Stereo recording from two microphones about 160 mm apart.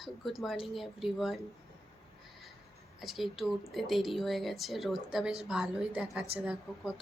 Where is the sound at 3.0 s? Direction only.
Centre (ahead or behind).